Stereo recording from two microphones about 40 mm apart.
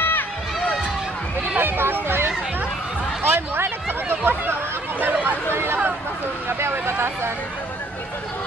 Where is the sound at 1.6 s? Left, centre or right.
Right.